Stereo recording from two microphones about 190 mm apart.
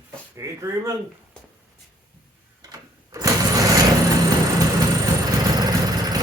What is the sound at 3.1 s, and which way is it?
Vehicle, 20° right (ahead or behind).